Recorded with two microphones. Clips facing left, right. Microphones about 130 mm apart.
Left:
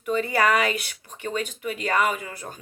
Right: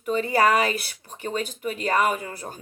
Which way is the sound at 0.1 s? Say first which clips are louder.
Right 1 dB; 35° right (ahead or behind).